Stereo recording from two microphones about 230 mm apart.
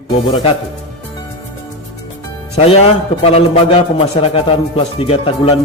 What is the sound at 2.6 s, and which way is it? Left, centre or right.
A man's voice, left.